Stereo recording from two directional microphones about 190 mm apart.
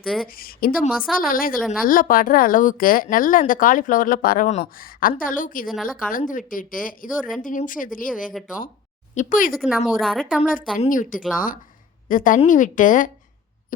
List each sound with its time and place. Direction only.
0.0 s a woman's voice: centre (ahead or behind)
0.3 s a woman's voice: 50° left (ahead or behind)
0.9 s a woman's voice: centre (ahead or behind)
1.2 s a woman's voice: 50° left (ahead or behind)
5.6 s a woman's voice: centre (ahead or behind)
6.1 s a woman's voice: 45° left (ahead or behind)
8.3 s a woman's voice: centre (ahead or behind)
9.1 s a woman's voice: 45° left (ahead or behind)
9.6 s a woman's voice: 5° right (ahead or behind)
10.8 s a woman's voice: 45° left (ahead or behind)
12.0 s a woman's voice: 45° left (ahead or behind)